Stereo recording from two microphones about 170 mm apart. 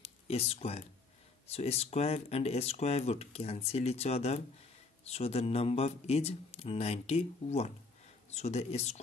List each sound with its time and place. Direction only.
0.0 s speech: 35° left (ahead or behind)